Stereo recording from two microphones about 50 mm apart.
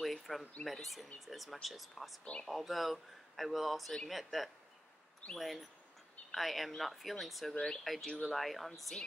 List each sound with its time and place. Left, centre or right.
0.0 s a sound: centre
0.7 s speech: centre
7.5 s speech: centre
7.8 s speech: centre